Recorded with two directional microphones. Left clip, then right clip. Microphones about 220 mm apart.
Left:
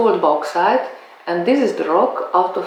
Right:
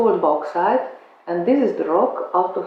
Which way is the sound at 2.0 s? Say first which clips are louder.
Left 3 dB; 25° right (ahead or behind).